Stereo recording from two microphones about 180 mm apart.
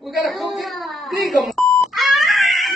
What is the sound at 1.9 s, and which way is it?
Cat, centre (ahead or behind).